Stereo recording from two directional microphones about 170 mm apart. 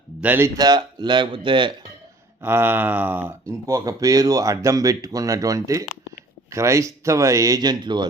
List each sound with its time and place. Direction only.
0.2 s speech: 10° right (ahead or behind); by 1.7 s 30° right (ahead or behind)
2.4 s speech: 15° right (ahead or behind)